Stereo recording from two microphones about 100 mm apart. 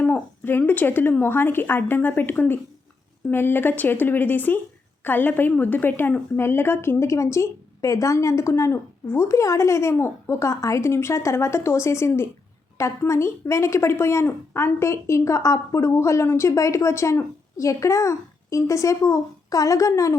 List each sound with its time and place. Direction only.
0.0 s a woman's voice: 20° left (ahead or behind)